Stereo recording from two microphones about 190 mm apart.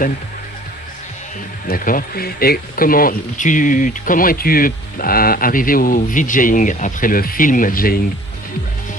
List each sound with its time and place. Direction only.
1.6 s speech: 45° left (ahead or behind)